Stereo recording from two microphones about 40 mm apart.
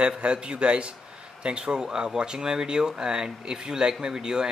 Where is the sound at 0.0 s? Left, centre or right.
Right.